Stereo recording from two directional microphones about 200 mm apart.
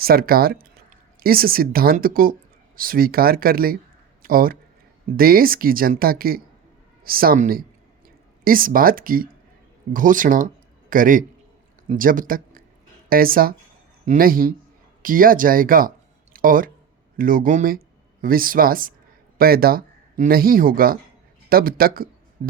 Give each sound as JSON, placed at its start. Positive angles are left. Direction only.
{"t": 0.0, "sound": "speech", "side_deg": -50}